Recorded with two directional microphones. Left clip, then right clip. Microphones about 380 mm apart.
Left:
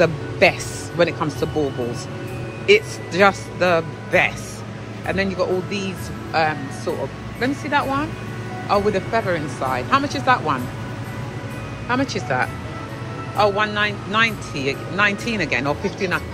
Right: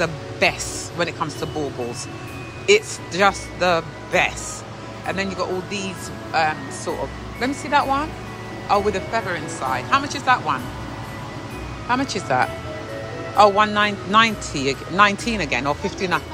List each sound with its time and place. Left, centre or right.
0.0 s speech: centre
11.9 s speech: centre